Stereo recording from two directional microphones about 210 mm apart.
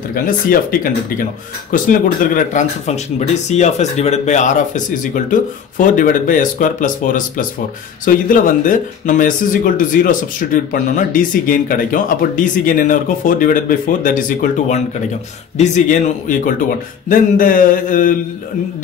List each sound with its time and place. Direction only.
0.1 s speech: 45° left (ahead or behind)